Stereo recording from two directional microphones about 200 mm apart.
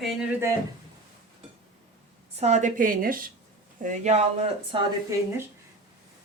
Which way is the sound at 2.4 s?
35° right (ahead or behind).